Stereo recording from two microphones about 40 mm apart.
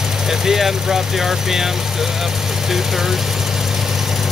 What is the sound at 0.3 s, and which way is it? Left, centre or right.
Speech, centre.